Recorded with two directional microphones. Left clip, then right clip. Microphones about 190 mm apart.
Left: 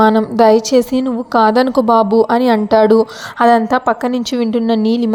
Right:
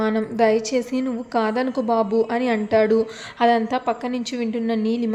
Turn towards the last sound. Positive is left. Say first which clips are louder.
# left 8 dB
turn(degrees=35)  # may be behind; listen again after turning